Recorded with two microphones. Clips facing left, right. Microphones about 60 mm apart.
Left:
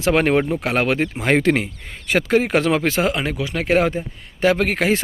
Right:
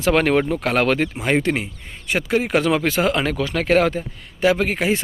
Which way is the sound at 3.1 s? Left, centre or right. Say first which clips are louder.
Right 2 dB; centre.